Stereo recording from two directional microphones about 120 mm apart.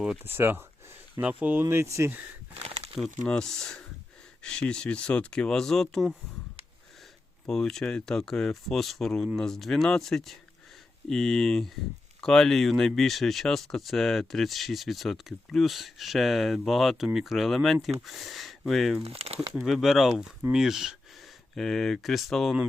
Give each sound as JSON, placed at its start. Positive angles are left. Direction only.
{"t": 0.3, "sound": "speech", "side_deg": -20}
{"t": 1.6, "sound": "speech", "side_deg": -25}
{"t": 2.6, "sound": "crumpling", "side_deg": -65}
{"t": 3.2, "sound": "speech", "side_deg": 5}
{"t": 7.4, "sound": "speech", "side_deg": 5}
{"t": 19.0, "sound": "speech", "side_deg": -55}
{"t": 19.5, "sound": "speech", "side_deg": 0}